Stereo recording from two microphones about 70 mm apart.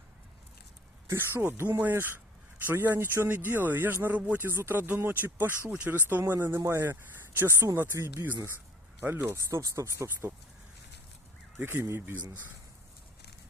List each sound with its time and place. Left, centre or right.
1.1 s speech: right
6.3 s speech: right
11.6 s speech: right